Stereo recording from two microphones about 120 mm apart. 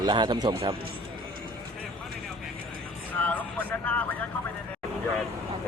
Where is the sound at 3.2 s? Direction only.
15° left (ahead or behind).